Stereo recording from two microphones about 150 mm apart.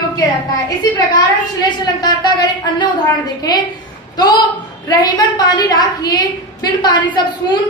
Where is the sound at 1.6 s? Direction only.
25° left (ahead or behind).